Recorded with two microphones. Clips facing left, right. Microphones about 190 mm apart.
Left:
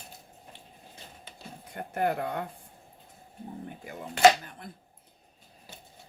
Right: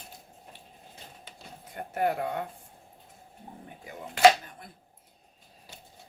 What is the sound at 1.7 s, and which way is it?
Speech, 55° left (ahead or behind).